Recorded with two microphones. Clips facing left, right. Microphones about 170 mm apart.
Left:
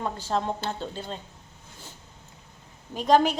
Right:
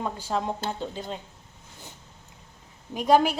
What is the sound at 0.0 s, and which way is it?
A woman's voice, 10° right (ahead or behind).